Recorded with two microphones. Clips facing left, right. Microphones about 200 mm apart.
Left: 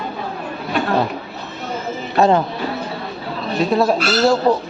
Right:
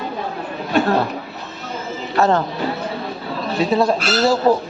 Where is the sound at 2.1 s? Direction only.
15° left (ahead or behind).